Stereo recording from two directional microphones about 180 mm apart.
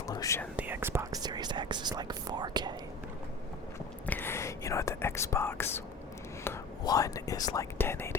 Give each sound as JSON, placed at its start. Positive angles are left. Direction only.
{"t": 0.1, "sound": "whispering", "side_deg": 20}
{"t": 0.5, "sound": "speech", "side_deg": -10}
{"t": 4.0, "sound": "whispering", "side_deg": 10}
{"t": 6.4, "sound": "speech", "side_deg": 15}